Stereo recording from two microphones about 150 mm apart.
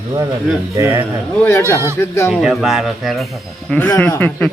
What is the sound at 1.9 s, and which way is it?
Speech, 15° left (ahead or behind).